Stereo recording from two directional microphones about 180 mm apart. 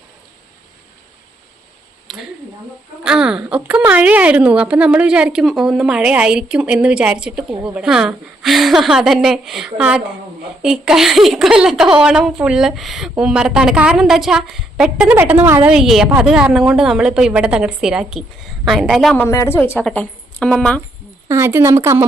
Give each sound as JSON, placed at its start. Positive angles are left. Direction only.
{"t": 2.1, "sound": "a woman's voice", "side_deg": 0}
{"t": 19.1, "sound": "a woman's voice", "side_deg": 15}
{"t": 21.2, "sound": "speech", "side_deg": -15}